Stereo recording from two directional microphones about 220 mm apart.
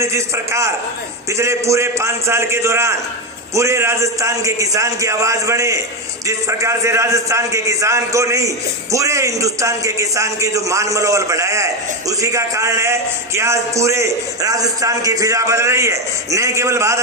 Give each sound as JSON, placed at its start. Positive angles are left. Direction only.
{"t": 0.0, "sound": "a man's voice", "side_deg": -15}